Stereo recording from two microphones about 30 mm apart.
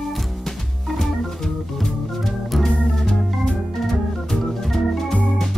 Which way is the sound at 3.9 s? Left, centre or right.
Centre.